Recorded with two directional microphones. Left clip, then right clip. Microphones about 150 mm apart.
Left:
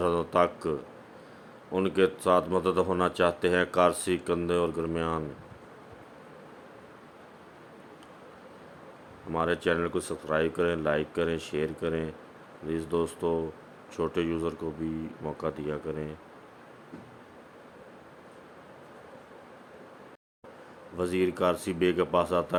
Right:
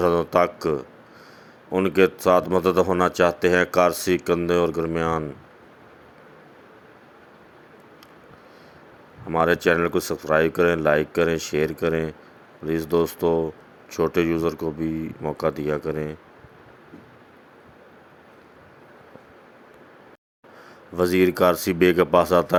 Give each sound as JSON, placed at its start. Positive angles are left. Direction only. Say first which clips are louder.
{"t": 0.0, "sound": "speech", "louder": "right 6 dB", "side_deg": -30}
{"t": 9.3, "sound": "speech", "louder": "right 8 dB", "side_deg": -30}
{"t": 20.9, "sound": "speech", "louder": "right 9 dB", "side_deg": -40}